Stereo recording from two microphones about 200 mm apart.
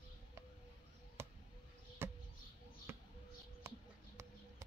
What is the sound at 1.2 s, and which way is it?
Basketball bounce, 15° right (ahead or behind).